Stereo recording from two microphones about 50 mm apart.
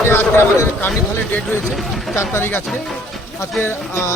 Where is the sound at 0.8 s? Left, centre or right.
Left.